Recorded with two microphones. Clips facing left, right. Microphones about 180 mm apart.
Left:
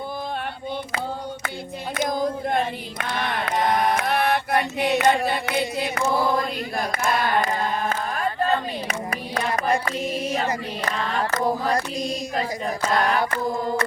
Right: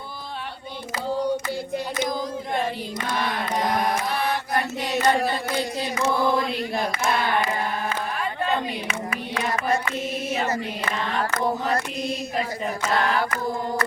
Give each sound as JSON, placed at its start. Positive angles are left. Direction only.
{"t": 2.0, "sound": "choir", "side_deg": 55}
{"t": 3.4, "sound": "mantra", "side_deg": 65}
{"t": 4.8, "sound": "chant", "side_deg": 65}
{"t": 7.4, "sound": "a sound", "side_deg": 45}
{"t": 10.4, "sound": "child singing", "side_deg": 35}
{"t": 13.0, "sound": "a capella", "side_deg": 30}